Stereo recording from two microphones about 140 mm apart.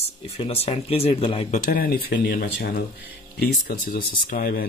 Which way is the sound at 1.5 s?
85° left.